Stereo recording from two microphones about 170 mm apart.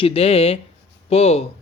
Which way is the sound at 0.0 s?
35° left (ahead or behind).